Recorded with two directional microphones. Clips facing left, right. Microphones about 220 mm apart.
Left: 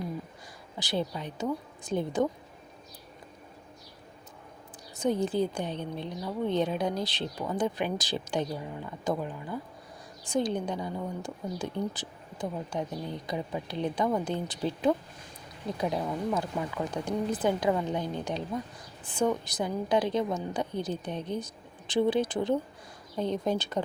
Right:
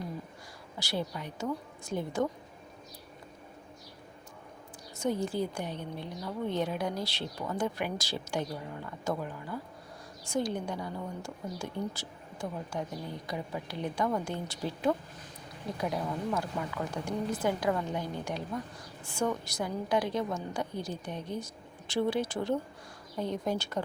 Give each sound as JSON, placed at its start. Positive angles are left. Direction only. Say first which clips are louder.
{"t": 0.8, "sound": "a woman's voice", "louder": "left 3 dB", "side_deg": 20}
{"t": 4.9, "sound": "a woman's voice", "louder": "left 4 dB", "side_deg": 20}